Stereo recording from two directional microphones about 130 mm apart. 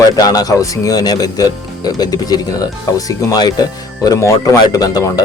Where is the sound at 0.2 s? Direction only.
30° left (ahead or behind).